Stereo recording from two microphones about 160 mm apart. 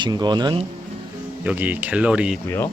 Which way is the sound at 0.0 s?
25° right (ahead or behind).